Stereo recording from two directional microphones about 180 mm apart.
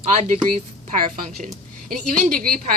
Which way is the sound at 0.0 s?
40° right (ahead or behind).